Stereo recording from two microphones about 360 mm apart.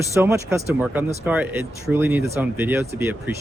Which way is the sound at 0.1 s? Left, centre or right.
Centre.